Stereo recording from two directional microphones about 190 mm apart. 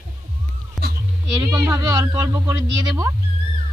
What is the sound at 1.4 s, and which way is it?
Speech, 20° right (ahead or behind).